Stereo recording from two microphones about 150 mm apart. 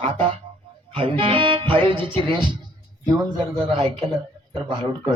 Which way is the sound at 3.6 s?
40° right (ahead or behind).